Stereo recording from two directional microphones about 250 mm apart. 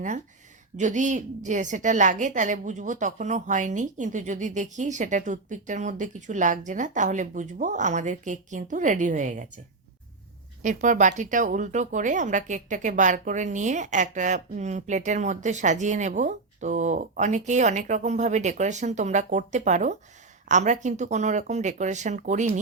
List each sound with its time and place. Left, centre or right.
0.8 s speech: right
10.6 s speech: right